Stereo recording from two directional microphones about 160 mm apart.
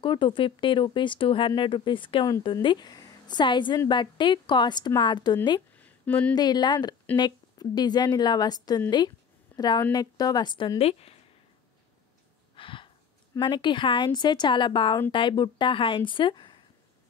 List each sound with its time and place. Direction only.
0.0 s a woman's voice: 30° left (ahead or behind)
5.8 s a sound: 10° left (ahead or behind)
6.3 s a woman's voice: 25° left (ahead or behind)
12.5 s a woman's voice: 30° left (ahead or behind)